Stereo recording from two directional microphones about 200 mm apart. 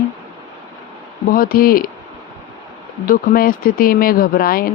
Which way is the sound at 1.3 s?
45° left (ahead or behind).